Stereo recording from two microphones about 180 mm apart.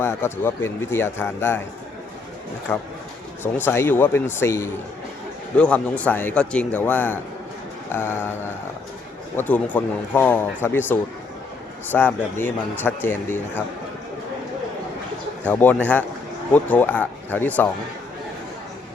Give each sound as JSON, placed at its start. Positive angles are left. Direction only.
{"t": 0.0, "sound": "a man's voice", "side_deg": 15}
{"t": 2.7, "sound": "a man's voice", "side_deg": 10}
{"t": 15.4, "sound": "a man's voice", "side_deg": 10}